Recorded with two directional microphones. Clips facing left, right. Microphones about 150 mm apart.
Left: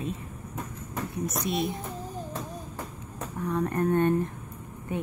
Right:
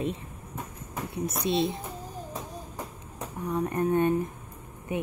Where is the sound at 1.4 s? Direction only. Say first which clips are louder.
Right 4 dB; 25° right (ahead or behind).